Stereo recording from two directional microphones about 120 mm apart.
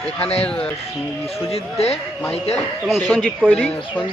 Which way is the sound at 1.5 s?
55° left (ahead or behind).